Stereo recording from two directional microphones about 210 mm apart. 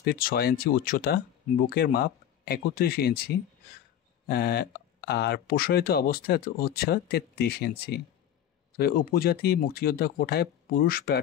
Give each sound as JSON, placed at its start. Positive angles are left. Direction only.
{"t": 0.0, "sound": "speech", "side_deg": 45}